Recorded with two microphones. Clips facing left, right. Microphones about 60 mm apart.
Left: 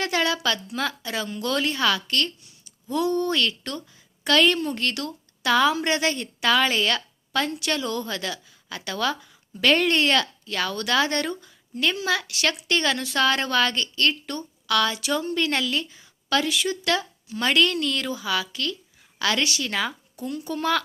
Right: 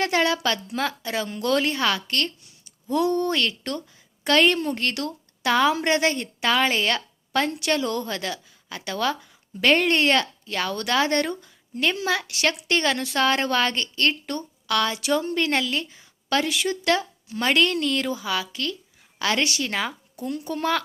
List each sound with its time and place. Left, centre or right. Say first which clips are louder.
0.0 s a woman's voice: right 2 dB; right
2.9 s a woman's voice: right 1 dB; right
3.3 s a woman's voice: even; right
5.7 s a woman's voice: right 2 dB; right
6.1 s a woman's voice: left 1 dB; right
15.4 s a woman's voice: right 1 dB; right
16.3 s a woman's voice: even; right
20.2 s a woman's voice: even; right